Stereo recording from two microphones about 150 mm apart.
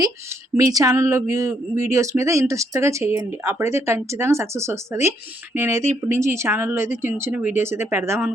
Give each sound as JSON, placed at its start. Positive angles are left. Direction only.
{"t": 0.0, "sound": "speech", "side_deg": -20}